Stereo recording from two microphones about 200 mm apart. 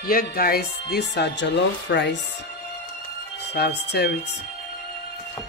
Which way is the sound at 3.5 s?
55° left (ahead or behind).